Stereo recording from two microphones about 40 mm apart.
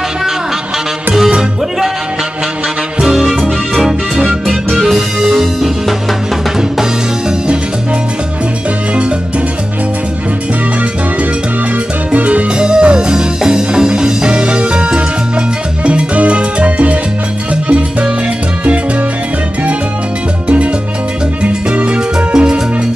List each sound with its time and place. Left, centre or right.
3.2 s music: centre
6.8 s music: centre
12.1 s music: right
12.5 s music: right
17.6 s salsa music: right
20.4 s music: right